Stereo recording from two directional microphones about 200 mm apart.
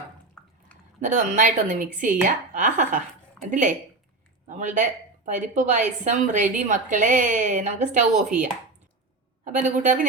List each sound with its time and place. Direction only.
0.4 s drip: 10° left (ahead or behind)
1.0 s a woman's voice: 40° right (ahead or behind)